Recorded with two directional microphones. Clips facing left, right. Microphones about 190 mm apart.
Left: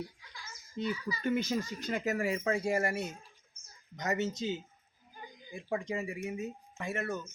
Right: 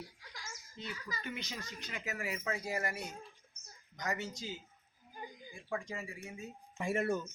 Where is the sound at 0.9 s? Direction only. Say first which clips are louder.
Left 7 dB; 45° right (ahead or behind).